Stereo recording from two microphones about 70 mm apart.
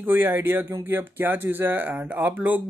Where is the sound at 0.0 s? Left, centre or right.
Right.